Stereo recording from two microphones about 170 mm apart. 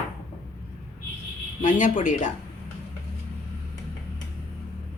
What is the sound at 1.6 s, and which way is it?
Speech, 50° left (ahead or behind).